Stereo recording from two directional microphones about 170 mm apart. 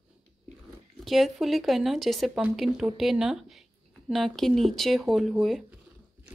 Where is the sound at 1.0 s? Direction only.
Centre (ahead or behind).